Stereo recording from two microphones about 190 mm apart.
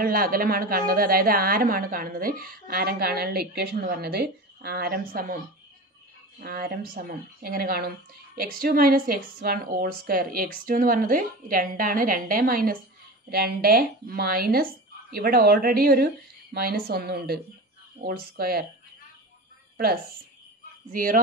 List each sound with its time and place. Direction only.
0.0 s a woman's voice: 50° right (ahead or behind)
6.4 s a woman's voice: 55° right (ahead or behind)
20.9 s a woman's voice: 45° right (ahead or behind)